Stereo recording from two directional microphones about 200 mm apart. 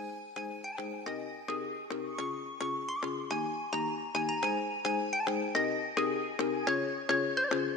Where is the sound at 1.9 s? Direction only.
Centre (ahead or behind).